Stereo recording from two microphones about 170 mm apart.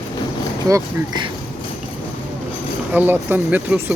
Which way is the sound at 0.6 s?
25° right (ahead or behind).